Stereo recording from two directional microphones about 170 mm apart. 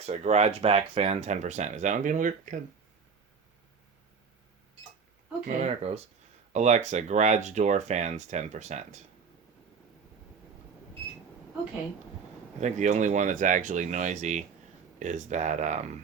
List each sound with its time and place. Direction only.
0.0 s speech: 40° right (ahead or behind)
5.5 s speech: 40° right (ahead or behind)
12.5 s speech: 45° right (ahead or behind)